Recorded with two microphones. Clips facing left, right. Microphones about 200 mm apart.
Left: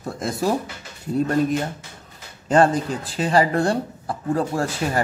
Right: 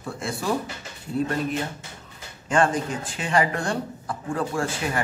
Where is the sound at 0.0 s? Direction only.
40° left (ahead or behind).